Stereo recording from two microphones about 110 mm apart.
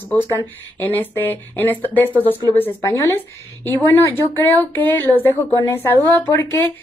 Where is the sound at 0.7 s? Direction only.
20° left (ahead or behind).